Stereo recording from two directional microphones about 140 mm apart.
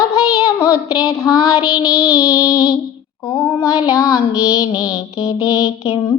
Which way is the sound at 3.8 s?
25° left (ahead or behind).